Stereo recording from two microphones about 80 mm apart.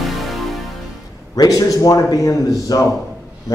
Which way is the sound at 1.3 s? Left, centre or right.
Left.